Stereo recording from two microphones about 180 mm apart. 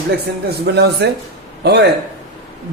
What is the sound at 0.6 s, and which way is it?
Speech, 65° right (ahead or behind).